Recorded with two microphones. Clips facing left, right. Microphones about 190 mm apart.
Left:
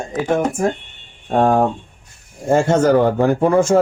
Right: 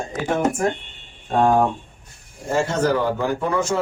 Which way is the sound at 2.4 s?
55° left (ahead or behind).